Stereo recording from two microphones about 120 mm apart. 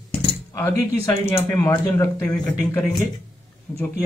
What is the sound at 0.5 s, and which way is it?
A man's voice, 20° left (ahead or behind).